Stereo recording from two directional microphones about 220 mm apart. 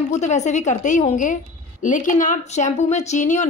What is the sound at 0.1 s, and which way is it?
A woman's voice, 30° left (ahead or behind).